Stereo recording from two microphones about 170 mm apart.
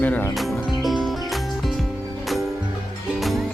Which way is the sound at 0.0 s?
10° left (ahead or behind).